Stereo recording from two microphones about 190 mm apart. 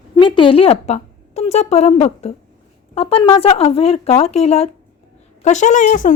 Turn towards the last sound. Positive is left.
turn(degrees=45)  # may be behind; listen again after turning